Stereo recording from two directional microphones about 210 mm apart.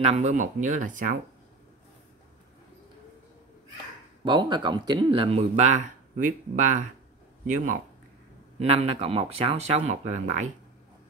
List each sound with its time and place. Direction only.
0.0 s speech: 35° right (ahead or behind)
4.2 s speech: 20° right (ahead or behind)